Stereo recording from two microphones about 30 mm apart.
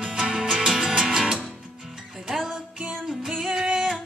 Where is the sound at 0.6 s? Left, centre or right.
Centre.